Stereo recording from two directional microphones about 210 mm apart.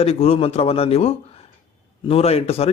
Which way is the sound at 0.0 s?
30° left (ahead or behind).